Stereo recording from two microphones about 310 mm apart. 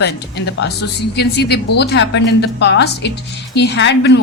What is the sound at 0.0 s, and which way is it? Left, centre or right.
Speech, left.